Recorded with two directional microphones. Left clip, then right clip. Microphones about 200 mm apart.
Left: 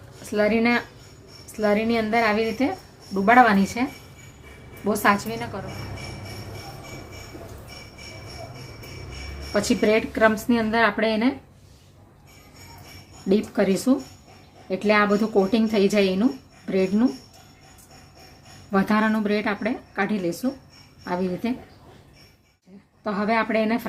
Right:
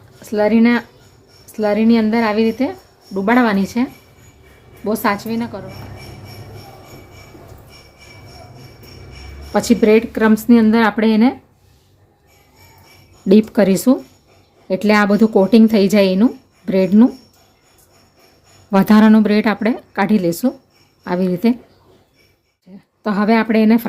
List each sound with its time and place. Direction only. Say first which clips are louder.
0.3 s a woman's voice: right 6 dB; 25° right (ahead or behind)
4.9 s a woman's voice: right 2 dB; 30° right (ahead or behind)
9.5 s speech: right 8 dB; 45° right (ahead or behind)
13.2 s speech: right 9 dB; 55° right (ahead or behind)
18.7 s a woman's voice: right 9 dB; 55° right (ahead or behind)
22.7 s a sound: right 7 dB; 55° right (ahead or behind)
23.0 s a woman's voice: right 7 dB; 55° right (ahead or behind)